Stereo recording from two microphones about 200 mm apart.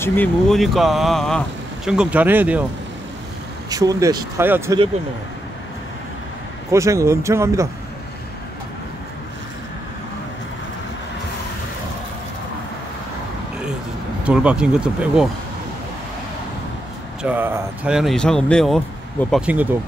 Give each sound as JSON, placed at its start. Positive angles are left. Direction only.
{"t": 0.0, "sound": "speech", "side_deg": 10}
{"t": 3.7, "sound": "speech", "side_deg": -20}
{"t": 6.7, "sound": "speech", "side_deg": -15}
{"t": 14.2, "sound": "speech", "side_deg": -5}
{"t": 17.2, "sound": "speech", "side_deg": -10}